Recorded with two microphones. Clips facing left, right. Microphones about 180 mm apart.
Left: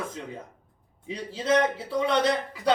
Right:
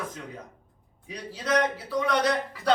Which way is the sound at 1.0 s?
25° left (ahead or behind).